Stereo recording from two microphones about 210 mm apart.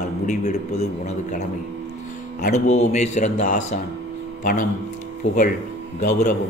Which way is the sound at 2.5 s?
35° left (ahead or behind).